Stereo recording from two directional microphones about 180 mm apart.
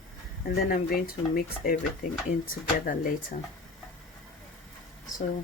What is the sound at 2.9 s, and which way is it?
Speech, 50° left (ahead or behind).